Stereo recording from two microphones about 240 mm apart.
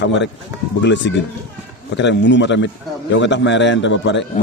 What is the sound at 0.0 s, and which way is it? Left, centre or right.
A man's voice, left.